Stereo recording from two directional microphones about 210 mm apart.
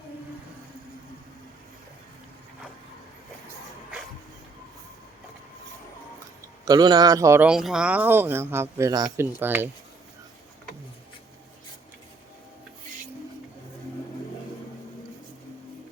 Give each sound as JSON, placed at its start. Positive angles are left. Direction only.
{"t": 6.7, "sound": "speech", "side_deg": -20}